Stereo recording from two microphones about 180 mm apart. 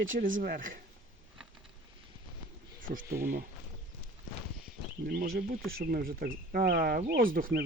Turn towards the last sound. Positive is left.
turn(degrees=-55)  # may be behind; listen again after turning